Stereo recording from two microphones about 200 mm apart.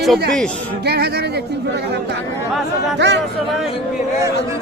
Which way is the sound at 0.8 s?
55° right (ahead or behind).